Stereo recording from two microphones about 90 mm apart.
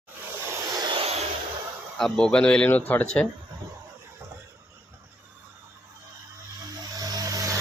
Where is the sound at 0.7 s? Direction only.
50° right (ahead or behind).